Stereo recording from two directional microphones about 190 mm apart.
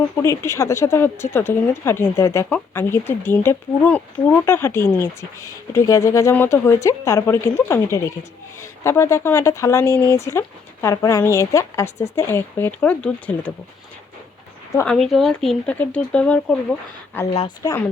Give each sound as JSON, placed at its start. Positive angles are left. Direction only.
{"t": 0.2, "sound": "speech", "side_deg": 15}
{"t": 14.8, "sound": "speech", "side_deg": 5}
{"t": 17.3, "sound": "speech", "side_deg": 25}